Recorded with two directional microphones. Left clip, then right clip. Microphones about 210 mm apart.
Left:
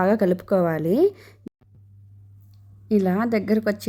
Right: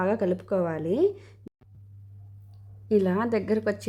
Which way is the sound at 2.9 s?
10° left (ahead or behind).